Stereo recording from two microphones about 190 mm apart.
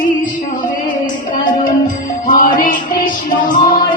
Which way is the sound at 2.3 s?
45° left (ahead or behind).